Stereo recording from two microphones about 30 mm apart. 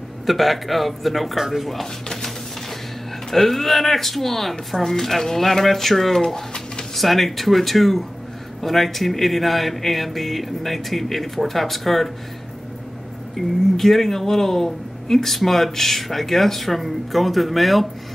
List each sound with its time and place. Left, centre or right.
0.3 s speech: centre
3.3 s speech: centre
6.2 s a sound: centre
7.0 s speech: centre
13.4 s speech: centre